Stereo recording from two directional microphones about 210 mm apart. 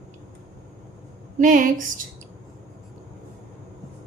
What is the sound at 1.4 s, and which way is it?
Speech, 40° right (ahead or behind).